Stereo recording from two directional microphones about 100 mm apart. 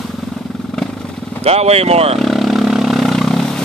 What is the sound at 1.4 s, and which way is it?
Speech, 90° right.